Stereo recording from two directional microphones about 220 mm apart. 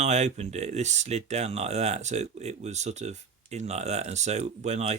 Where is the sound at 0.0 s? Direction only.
30° right (ahead or behind).